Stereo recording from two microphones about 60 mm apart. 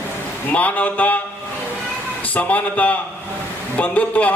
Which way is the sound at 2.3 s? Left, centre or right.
Left.